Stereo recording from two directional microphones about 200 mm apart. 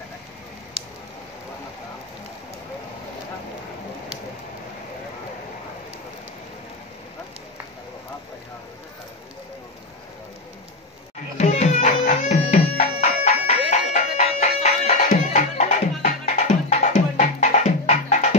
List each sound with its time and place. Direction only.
11.3 s music: 35° left (ahead or behind)